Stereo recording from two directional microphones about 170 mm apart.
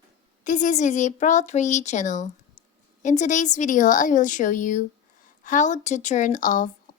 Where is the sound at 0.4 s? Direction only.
45° left (ahead or behind).